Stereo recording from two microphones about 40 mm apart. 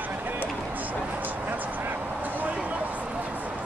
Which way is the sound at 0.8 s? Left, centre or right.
Right.